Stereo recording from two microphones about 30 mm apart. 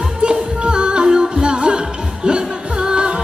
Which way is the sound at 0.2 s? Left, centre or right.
Right.